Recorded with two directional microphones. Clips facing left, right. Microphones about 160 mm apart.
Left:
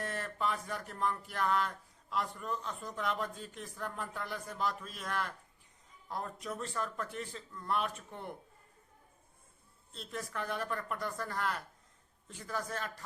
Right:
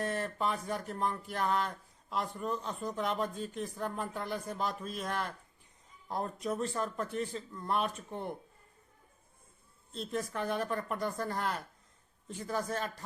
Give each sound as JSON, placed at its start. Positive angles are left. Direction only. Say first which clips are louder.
{"t": 0.0, "sound": "speech", "louder": "right 3 dB", "side_deg": -25}
{"t": 9.9, "sound": "speech", "louder": "right 5 dB", "side_deg": -25}